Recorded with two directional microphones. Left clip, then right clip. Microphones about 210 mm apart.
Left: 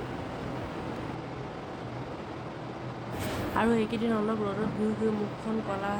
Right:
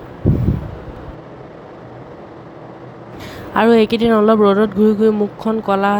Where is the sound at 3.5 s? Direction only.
45° right (ahead or behind).